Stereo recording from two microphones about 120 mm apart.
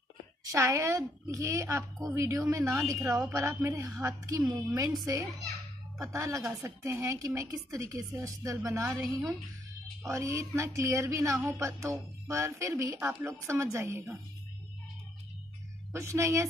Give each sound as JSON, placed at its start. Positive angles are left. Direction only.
{"t": 0.4, "sound": "a woman's voice", "side_deg": -25}
{"t": 9.0, "sound": "speech", "side_deg": 0}
{"t": 10.0, "sound": "a woman's voice", "side_deg": -25}
{"t": 15.9, "sound": "a woman's voice", "side_deg": -25}